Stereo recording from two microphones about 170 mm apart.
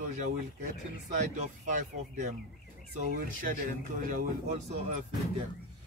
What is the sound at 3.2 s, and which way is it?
Speech, 55° right (ahead or behind).